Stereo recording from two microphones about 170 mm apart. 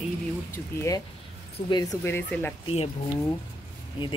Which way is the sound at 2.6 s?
35° left (ahead or behind).